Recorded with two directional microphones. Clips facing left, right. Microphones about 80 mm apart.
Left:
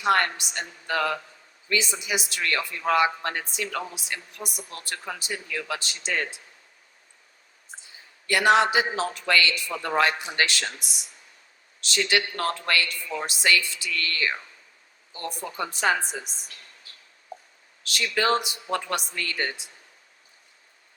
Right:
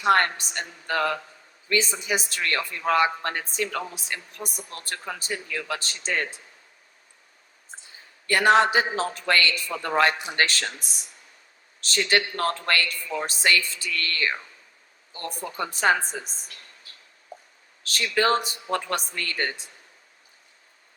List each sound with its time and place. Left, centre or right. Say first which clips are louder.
0.1 s a man's voice: right 2 dB; right
8.3 s a man's voice: right 1 dB; right
15.5 s a man's voice: right 2 dB; right
17.8 s a man's voice: right 1 dB; right